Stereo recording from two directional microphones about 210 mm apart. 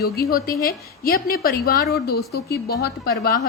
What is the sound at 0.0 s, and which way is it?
A woman's voice, 45° left (ahead or behind).